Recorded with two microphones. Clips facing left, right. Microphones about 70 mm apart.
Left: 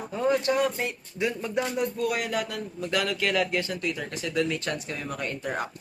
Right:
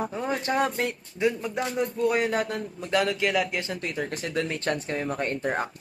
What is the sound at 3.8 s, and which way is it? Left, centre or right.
Speech, right.